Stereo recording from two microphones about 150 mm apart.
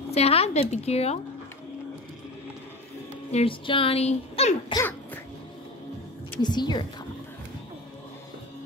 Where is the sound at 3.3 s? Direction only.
35° left (ahead or behind).